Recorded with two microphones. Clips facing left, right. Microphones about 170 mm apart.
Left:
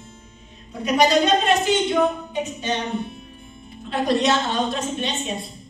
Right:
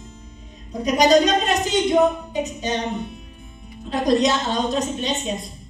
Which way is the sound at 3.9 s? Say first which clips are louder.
Right 1 dB; 40° right (ahead or behind).